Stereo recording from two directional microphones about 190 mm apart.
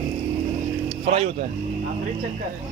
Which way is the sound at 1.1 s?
30° right (ahead or behind).